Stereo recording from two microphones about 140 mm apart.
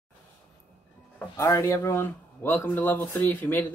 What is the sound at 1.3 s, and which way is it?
Speech, 25° left (ahead or behind).